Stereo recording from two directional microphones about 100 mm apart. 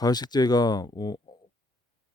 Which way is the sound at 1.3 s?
45° left (ahead or behind).